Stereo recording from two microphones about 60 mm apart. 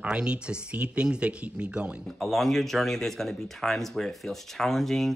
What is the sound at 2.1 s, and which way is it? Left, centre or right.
Speech, centre.